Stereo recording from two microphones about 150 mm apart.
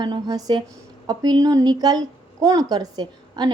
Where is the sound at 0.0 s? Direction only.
30° right (ahead or behind).